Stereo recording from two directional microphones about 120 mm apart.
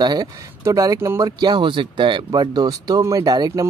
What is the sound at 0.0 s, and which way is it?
Speech, 35° right (ahead or behind).